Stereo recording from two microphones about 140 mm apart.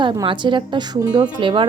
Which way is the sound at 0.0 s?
35° right (ahead or behind).